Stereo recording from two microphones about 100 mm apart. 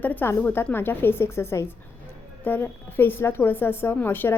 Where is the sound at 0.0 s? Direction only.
20° left (ahead or behind).